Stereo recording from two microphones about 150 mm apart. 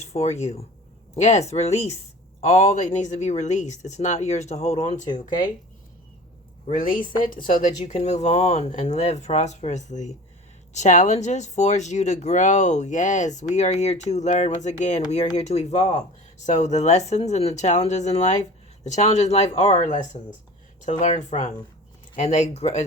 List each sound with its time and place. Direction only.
0.0 s speech: 50° left (ahead or behind)
6.7 s speech: 65° left (ahead or behind)
7.9 s speech: 50° left (ahead or behind)